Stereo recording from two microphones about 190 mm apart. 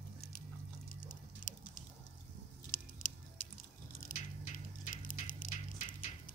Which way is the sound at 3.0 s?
45° left (ahead or behind).